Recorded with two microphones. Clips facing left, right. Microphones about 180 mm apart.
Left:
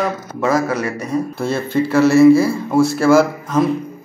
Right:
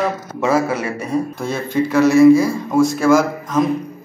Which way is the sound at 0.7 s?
30° right (ahead or behind).